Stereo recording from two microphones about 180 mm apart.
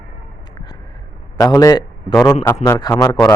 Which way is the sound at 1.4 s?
20° left (ahead or behind).